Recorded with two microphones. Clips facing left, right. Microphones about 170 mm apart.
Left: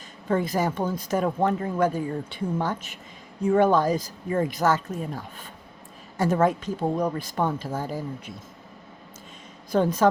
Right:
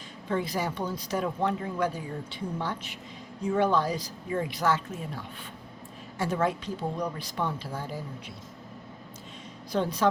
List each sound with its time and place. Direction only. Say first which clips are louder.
0.3 s speech: left 5 dB; 50° left (ahead or behind)
9.7 s speech: left 6 dB; 45° left (ahead or behind)